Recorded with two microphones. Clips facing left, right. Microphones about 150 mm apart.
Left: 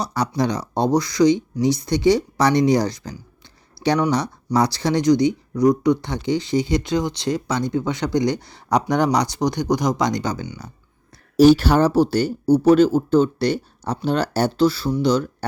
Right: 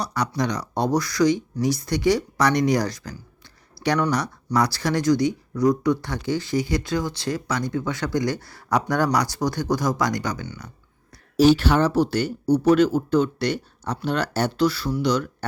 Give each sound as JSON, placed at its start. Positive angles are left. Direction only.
{"t": 0.3, "sound": "speech", "side_deg": 30}
{"t": 3.8, "sound": "a sound", "side_deg": 0}
{"t": 4.5, "sound": "speech", "side_deg": 25}
{"t": 11.3, "sound": "speech", "side_deg": 40}